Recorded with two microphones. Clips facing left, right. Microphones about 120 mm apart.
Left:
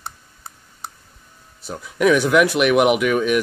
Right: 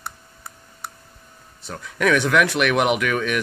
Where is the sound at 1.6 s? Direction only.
10° left (ahead or behind).